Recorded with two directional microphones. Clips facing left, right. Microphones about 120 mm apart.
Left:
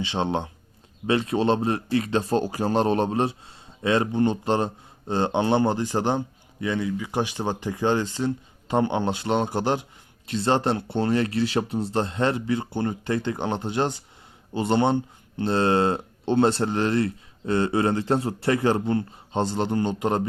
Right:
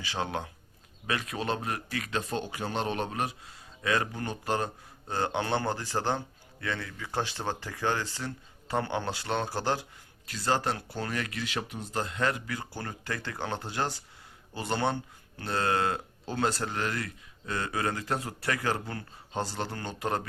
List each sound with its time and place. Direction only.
0.0 s speech: 25° left (ahead or behind)